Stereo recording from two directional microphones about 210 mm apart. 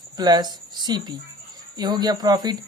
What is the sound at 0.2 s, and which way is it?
Speech, 20° right (ahead or behind).